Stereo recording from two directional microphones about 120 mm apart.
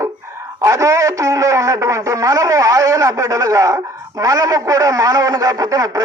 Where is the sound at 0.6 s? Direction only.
25° right (ahead or behind).